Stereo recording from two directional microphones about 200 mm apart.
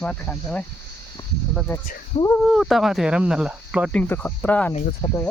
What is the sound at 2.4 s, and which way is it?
Speech, centre (ahead or behind).